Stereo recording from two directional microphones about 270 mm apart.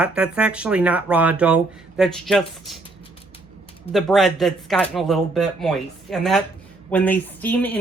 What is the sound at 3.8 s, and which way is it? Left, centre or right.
Speech, centre.